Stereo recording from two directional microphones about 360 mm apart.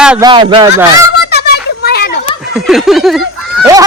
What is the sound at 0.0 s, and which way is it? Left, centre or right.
Speech, centre.